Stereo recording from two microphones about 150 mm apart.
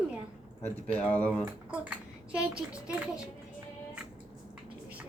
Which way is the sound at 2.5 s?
5° right (ahead or behind).